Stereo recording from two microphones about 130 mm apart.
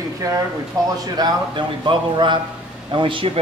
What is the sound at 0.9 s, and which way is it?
A man's voice, 30° right (ahead or behind).